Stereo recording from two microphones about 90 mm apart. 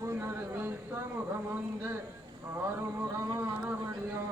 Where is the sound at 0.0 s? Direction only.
30° right (ahead or behind).